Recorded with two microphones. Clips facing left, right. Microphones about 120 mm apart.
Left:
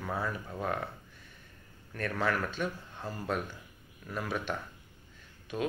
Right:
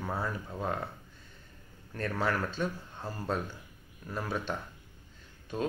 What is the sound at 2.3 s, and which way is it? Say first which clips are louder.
Speech: even; 30° right (ahead or behind).